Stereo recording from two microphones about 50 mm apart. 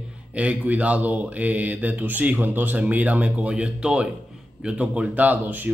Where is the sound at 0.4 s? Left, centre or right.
Right.